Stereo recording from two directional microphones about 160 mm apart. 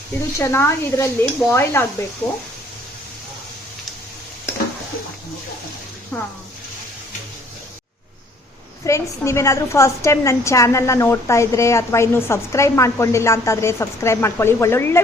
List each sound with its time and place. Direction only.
0.3 s a woman's voice: 15° left (ahead or behind)
6.1 s a woman's voice: 10° left (ahead or behind)
8.8 s a woman's voice: 15° left (ahead or behind)